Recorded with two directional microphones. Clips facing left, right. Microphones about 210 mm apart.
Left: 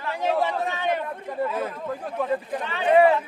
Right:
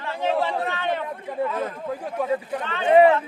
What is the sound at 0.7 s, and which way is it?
A man's voice, 15° left (ahead or behind).